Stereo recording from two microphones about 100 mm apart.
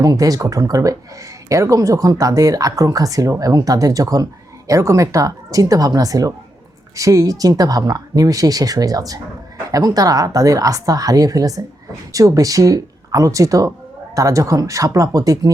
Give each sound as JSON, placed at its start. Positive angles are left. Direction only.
{"t": 0.0, "sound": "speech", "side_deg": -35}